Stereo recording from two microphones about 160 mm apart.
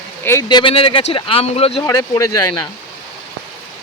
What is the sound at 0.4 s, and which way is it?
Speech, 30° left (ahead or behind).